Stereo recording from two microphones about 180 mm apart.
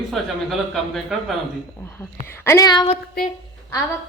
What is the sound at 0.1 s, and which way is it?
Speech, centre (ahead or behind).